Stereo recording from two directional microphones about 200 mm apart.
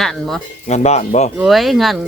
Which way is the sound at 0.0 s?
Centre (ahead or behind).